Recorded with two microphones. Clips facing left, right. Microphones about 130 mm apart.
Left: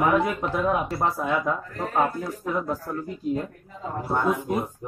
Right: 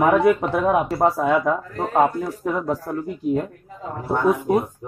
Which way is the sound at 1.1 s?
80° right.